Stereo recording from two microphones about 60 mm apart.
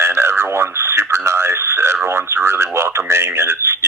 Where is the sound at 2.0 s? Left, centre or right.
Right.